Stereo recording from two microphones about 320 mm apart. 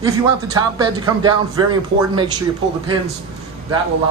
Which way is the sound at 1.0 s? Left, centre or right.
Centre.